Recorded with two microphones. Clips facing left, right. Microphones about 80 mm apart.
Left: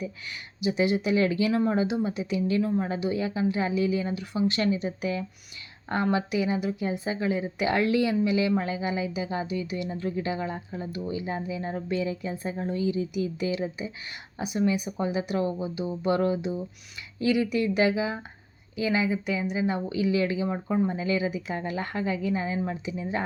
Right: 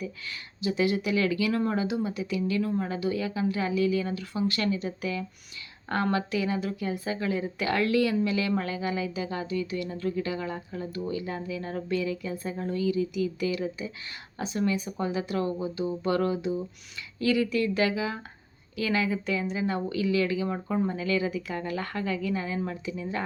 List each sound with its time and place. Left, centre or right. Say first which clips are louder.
0.6 s speech: left 2 dB; left